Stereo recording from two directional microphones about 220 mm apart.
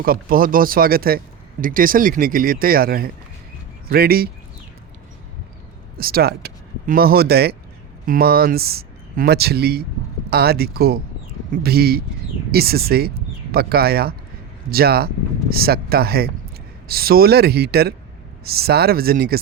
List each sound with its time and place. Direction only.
0.0 s speech: 40° right (ahead or behind)
6.0 s speech: 45° right (ahead or behind)